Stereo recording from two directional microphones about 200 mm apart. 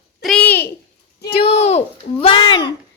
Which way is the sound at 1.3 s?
30° left (ahead or behind).